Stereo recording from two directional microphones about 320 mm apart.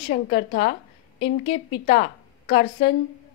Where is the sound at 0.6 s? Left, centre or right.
Centre.